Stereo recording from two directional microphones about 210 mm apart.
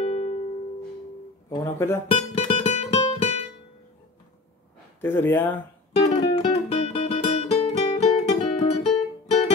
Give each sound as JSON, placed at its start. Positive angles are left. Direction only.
{"t": 0.0, "sound": "music", "side_deg": 30}
{"t": 1.5, "sound": "speech", "side_deg": 15}
{"t": 2.0, "sound": "music", "side_deg": 30}
{"t": 5.0, "sound": "speech", "side_deg": 10}
{"t": 5.9, "sound": "music", "side_deg": 30}